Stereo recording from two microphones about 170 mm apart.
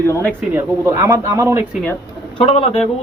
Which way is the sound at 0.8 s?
15° right (ahead or behind).